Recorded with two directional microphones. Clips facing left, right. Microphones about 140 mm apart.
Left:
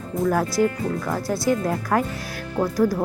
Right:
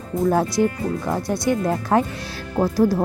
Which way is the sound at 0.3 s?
25° right (ahead or behind).